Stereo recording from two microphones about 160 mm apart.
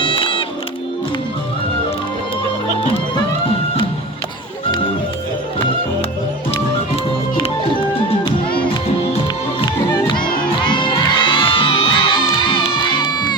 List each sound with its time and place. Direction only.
0.0 s music: 30° left (ahead or behind)
10.6 s children shouting: 30° left (ahead or behind)